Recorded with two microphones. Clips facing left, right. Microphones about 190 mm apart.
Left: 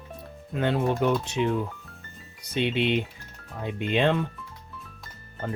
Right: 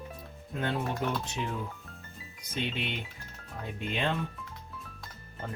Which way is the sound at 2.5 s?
80° left.